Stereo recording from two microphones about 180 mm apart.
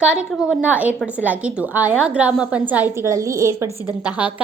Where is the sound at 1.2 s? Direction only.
10° right (ahead or behind).